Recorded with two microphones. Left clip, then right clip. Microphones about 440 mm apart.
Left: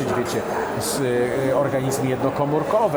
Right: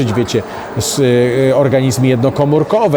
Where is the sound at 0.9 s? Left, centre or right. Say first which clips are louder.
Right 11 dB; right.